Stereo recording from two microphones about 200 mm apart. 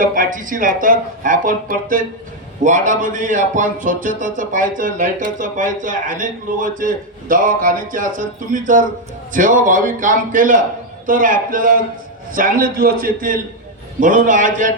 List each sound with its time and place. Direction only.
0.0 s speech: 45° right (ahead or behind)